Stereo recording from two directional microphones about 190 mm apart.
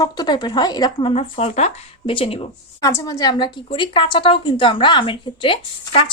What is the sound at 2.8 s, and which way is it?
Speech, 15° left (ahead or behind).